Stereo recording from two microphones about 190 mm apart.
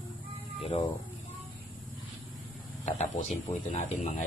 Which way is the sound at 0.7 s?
30° left (ahead or behind).